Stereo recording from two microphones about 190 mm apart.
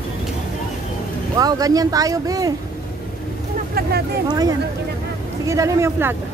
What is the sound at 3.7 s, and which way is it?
Vehicle, 55° right (ahead or behind).